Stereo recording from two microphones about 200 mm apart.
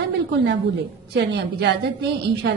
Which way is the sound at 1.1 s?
55° right (ahead or behind).